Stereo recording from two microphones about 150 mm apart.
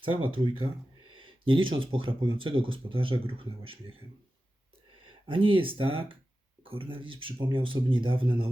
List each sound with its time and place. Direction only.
0.0 s speech: 35° right (ahead or behind)
5.3 s speech: 35° right (ahead or behind)